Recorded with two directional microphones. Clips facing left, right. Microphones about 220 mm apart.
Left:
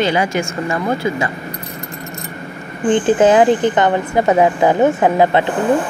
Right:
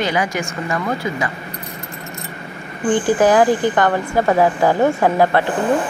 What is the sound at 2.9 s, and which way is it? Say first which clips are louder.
A woman's voice: left 2 dB; 20° left (ahead or behind).